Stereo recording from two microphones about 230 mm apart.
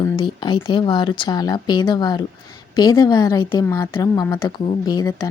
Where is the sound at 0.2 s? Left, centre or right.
Left.